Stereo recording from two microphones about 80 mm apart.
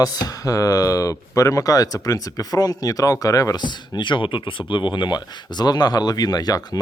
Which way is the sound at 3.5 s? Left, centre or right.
Left.